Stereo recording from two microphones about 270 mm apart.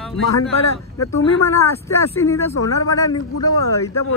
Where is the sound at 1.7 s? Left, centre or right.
Centre.